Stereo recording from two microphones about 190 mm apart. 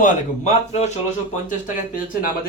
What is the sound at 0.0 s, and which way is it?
Speech, 35° left (ahead or behind).